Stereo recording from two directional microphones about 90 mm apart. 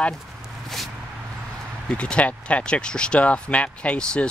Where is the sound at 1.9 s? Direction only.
10° left (ahead or behind).